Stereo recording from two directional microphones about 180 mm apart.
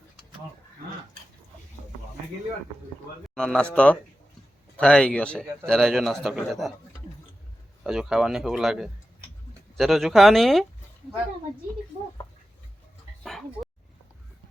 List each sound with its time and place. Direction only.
3.3 s a man's voice: 5° left (ahead or behind)
7.9 s a man's voice: 5° right (ahead or behind)
13.2 s dog: centre (ahead or behind)